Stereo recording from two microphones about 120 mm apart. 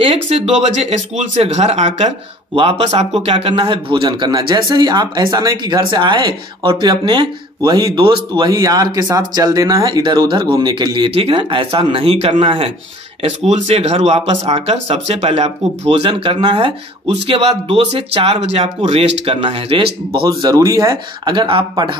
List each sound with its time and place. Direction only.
0.0 s speech: 55° right (ahead or behind); by 2.0 s 70° right (ahead or behind)
2.5 s a man's voice: 55° right (ahead or behind); by 11.1 s 40° right (ahead or behind)
11.1 s speech: 50° right (ahead or behind)
20.2 s a man's voice: 30° right (ahead or behind); by 21.9 s 45° right (ahead or behind)